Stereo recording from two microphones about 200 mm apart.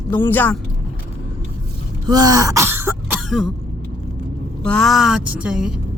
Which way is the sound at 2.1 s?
20° right (ahead or behind).